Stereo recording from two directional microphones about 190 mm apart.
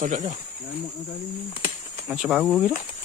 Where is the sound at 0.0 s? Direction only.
40° right (ahead or behind).